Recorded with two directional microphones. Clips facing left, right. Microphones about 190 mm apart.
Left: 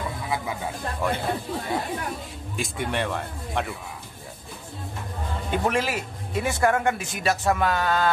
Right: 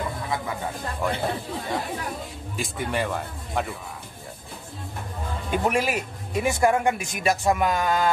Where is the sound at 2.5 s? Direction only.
Centre (ahead or behind).